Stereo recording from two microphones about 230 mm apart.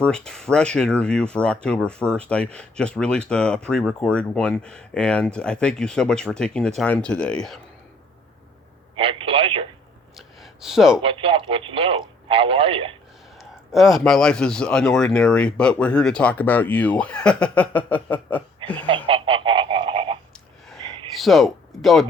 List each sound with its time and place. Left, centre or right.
0.0 s speech: centre
9.0 s telephone: right
10.2 s a sound: centre
11.0 s speech: right
13.4 s speech: centre
19.0 s frog: right
20.3 s a sound: centre
21.2 s speech: centre